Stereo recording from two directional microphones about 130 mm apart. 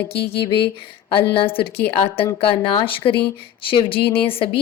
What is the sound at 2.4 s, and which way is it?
Speech, 45° left (ahead or behind).